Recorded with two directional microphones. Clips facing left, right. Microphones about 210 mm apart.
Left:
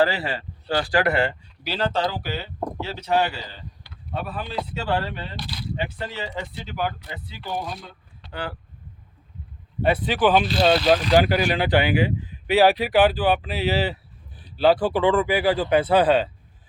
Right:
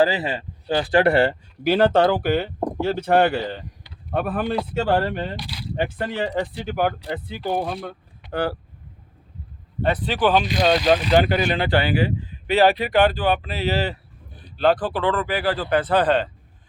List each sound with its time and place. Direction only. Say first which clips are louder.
0.0 s speech: right 2 dB; 20° right (ahead or behind); by 1.4 s 35° right (ahead or behind)
1.6 s speech: right 8 dB; 50° right (ahead or behind)
2.6 s a sound: right 4 dB; 15° right (ahead or behind)
2.8 s speech: right 5 dB; 50° right (ahead or behind)
5.4 s speech: even; 10° right (ahead or behind)
5.7 s speech: right 7 dB; 50° right (ahead or behind)
8.3 s speech: right 8 dB; 45° right (ahead or behind)
9.8 s speech: left 1 dB; 10° left (ahead or behind)
10.8 s speech: right 1 dB; 10° right (ahead or behind)
11.1 s speech: even; 10° left (ahead or behind)